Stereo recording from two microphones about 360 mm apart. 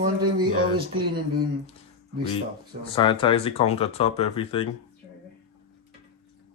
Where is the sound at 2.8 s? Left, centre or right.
Centre.